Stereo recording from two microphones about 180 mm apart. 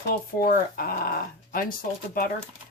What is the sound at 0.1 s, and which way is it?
Speech, 55° left (ahead or behind).